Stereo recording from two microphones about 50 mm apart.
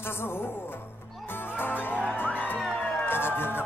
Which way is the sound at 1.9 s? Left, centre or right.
Right.